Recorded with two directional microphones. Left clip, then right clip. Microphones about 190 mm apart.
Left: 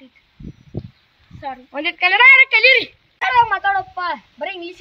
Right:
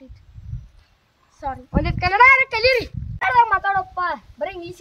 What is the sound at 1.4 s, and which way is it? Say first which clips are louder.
Speech: left 2 dB; 5° right (ahead or behind).